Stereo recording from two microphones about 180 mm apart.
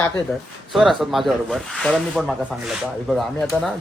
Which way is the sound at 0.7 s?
Centre (ahead or behind).